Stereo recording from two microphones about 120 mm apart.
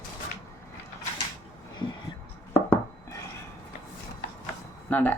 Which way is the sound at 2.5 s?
20° left (ahead or behind).